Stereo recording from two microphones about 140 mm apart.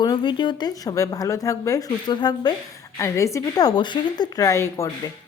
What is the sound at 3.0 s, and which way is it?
Speech, 20° left (ahead or behind).